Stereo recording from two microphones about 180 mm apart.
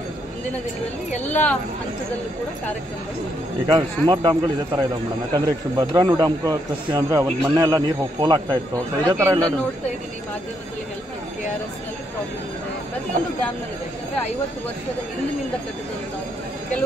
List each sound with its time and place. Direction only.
1.2 s speech: 10° left (ahead or behind)
3.6 s a man's voice: 25° right (ahead or behind)